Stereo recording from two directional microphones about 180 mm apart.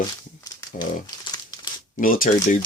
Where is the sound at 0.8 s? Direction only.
20° left (ahead or behind).